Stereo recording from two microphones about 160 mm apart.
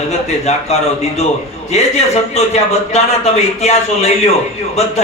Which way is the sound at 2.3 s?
40° left (ahead or behind).